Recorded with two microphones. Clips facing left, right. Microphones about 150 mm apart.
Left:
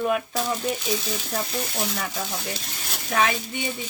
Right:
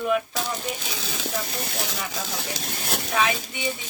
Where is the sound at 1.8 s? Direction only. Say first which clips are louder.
Left 2 dB; 90° right; by 3.0 s 65° right (ahead or behind).